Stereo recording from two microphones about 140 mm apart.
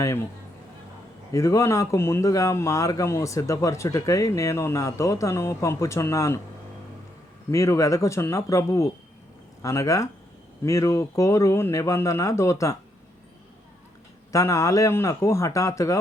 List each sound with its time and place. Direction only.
1.3 s speech: 20° left (ahead or behind)
7.5 s speech: 20° left (ahead or behind)
14.3 s speech: 20° left (ahead or behind)